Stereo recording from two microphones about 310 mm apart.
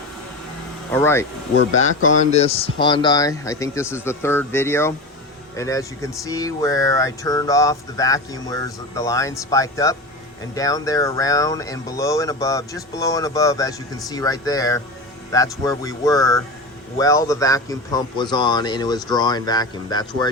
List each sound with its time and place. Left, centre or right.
0.9 s speech: centre
1.9 s speech: left
2.3 s speech: centre